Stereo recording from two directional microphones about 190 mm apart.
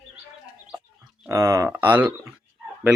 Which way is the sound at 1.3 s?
15° right (ahead or behind).